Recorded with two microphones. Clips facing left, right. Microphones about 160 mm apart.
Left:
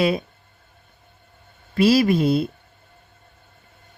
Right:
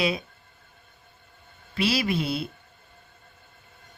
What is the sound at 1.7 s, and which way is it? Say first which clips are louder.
Speech: left 9 dB; 45° left (ahead or behind).